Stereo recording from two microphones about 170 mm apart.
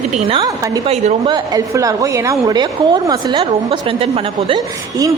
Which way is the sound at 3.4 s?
35° right (ahead or behind).